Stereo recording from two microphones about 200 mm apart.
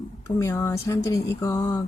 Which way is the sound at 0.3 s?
15° left (ahead or behind).